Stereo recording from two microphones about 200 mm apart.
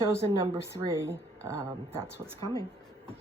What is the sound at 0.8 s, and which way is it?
Speech, 15° right (ahead or behind).